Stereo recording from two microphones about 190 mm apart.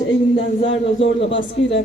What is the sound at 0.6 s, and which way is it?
A woman's voice, 80° left.